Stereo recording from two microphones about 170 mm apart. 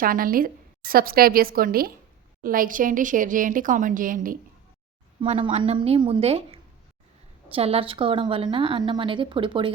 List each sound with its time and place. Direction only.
0.0 s a woman's voice: 55° right (ahead or behind)
5.2 s a woman's voice: 30° right (ahead or behind)